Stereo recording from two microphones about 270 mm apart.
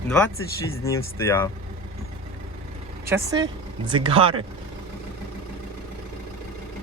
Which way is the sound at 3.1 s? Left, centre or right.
Centre.